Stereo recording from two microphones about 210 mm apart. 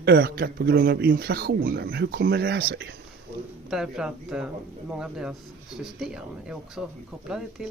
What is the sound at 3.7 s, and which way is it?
Speech, centre (ahead or behind).